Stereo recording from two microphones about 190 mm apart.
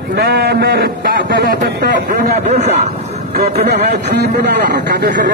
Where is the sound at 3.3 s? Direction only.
55° right (ahead or behind).